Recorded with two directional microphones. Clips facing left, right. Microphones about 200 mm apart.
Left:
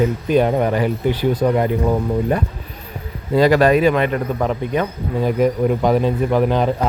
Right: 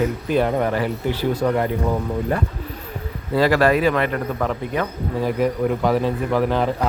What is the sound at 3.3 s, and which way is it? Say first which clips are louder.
Speech: left 4 dB; 20° left (ahead or behind).